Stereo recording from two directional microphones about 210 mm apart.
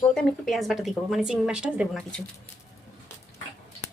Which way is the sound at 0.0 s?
5° left (ahead or behind).